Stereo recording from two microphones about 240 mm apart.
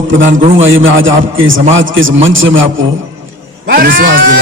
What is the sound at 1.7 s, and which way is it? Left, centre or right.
Music, right.